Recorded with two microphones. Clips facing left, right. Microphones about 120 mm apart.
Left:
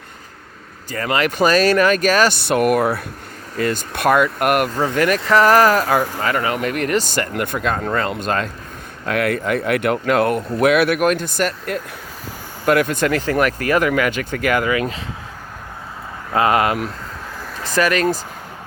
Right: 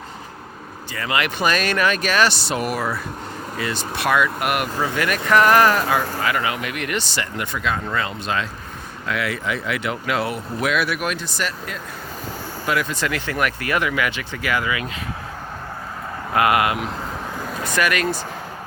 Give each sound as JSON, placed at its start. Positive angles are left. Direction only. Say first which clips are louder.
{"t": 0.9, "sound": "speech", "louder": "left 4 dB", "side_deg": 45}
{"t": 3.6, "sound": "speech", "louder": "left 6 dB", "side_deg": 45}
{"t": 16.3, "sound": "speech", "louder": "left 2 dB", "side_deg": 30}